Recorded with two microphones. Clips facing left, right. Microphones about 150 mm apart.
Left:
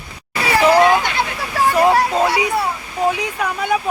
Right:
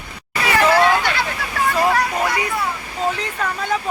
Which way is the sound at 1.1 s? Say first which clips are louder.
Left 3 dB; 20° left (ahead or behind).